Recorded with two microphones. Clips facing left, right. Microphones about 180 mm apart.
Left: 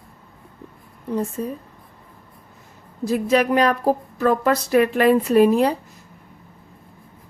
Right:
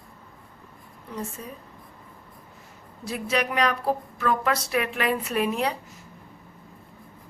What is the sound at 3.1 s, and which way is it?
Speech, 40° left (ahead or behind).